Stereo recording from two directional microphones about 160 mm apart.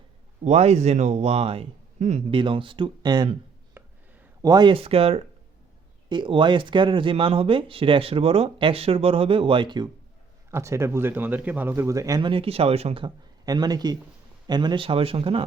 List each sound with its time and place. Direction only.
0.4 s a man's voice: 45° right (ahead or behind)
2.3 s speech: 30° right (ahead or behind)
3.8 s a sound: 10° right (ahead or behind)
4.4 s speech: 25° right (ahead or behind)
10.5 s a man's voice: 15° right (ahead or behind); by 15.4 s 35° right (ahead or behind)